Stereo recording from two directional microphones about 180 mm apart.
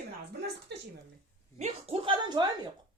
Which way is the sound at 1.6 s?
35° right (ahead or behind).